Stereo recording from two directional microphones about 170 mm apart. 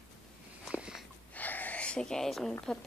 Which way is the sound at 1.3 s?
10° left (ahead or behind).